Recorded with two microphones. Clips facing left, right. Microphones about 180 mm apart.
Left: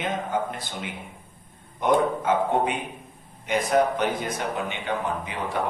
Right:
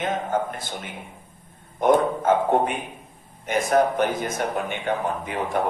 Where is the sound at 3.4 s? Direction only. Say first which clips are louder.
Right 2 dB; 45° right (ahead or behind).